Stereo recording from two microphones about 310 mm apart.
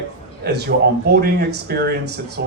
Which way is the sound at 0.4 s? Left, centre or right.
Right.